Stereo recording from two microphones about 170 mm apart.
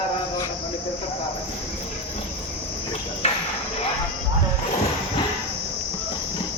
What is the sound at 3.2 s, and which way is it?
Music, 40° left (ahead or behind).